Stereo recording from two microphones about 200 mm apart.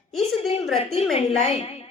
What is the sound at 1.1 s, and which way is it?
Speech, 30° left (ahead or behind).